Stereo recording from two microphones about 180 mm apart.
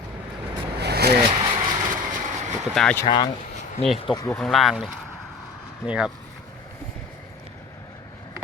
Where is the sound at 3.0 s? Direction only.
25° left (ahead or behind).